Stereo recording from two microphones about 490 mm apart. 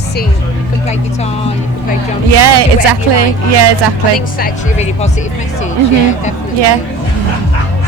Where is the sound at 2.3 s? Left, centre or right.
Right.